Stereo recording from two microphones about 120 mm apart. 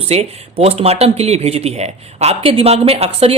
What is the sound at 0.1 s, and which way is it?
Speech, 60° right (ahead or behind).